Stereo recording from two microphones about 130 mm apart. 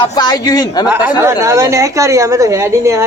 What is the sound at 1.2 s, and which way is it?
A woman's voice, 20° right (ahead or behind).